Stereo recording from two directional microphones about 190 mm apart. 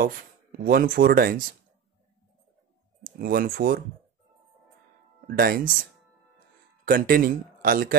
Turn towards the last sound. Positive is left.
turn(degrees=-50)  # may be behind; listen again after turning